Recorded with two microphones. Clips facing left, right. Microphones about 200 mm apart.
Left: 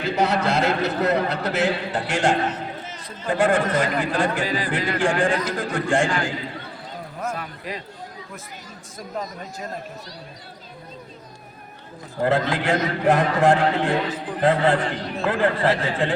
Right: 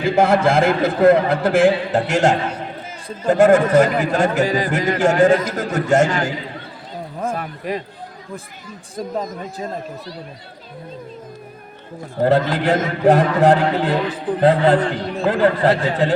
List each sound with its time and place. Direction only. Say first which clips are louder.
0.0 s speech: right 6 dB; 50° right (ahead or behind)
7.3 s a sound: right 7 dB; 50° right (ahead or behind)
9.2 s speech: right 6 dB; 50° right (ahead or behind)
12.2 s a man's voice: right 5 dB; 35° right (ahead or behind)